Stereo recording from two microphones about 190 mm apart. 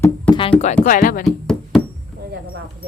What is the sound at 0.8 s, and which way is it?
Speech, 45° left (ahead or behind).